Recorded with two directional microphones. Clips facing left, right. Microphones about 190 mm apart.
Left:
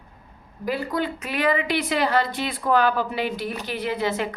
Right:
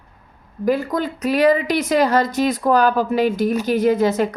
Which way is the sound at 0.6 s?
45° right (ahead or behind).